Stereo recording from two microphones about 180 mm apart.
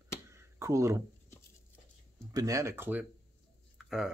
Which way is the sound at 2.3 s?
20° right (ahead or behind).